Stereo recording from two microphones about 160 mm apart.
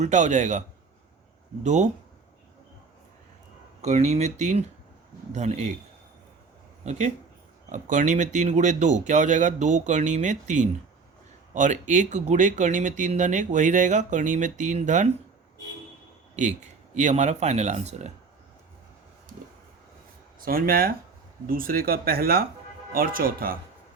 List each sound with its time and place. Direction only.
0.0 s speech: 45° right (ahead or behind)
1.6 s speech: 45° right (ahead or behind)
3.8 s speech: 45° right (ahead or behind)
7.7 s speech: 50° right (ahead or behind)
16.3 s speech: 45° right (ahead or behind)
20.4 s speech: 65° right (ahead or behind)